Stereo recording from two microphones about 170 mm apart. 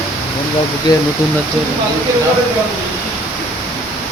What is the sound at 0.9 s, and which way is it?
Speech, 25° left (ahead or behind).